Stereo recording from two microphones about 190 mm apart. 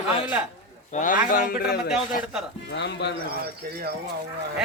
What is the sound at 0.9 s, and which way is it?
Speech, 45° left (ahead or behind).